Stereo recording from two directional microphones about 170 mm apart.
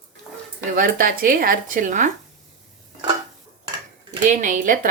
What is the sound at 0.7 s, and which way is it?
Speech, 55° right (ahead or behind).